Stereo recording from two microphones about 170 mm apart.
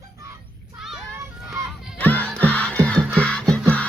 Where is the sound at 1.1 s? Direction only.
20° right (ahead or behind).